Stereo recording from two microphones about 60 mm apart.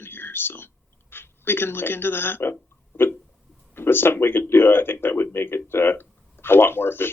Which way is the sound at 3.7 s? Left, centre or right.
Left.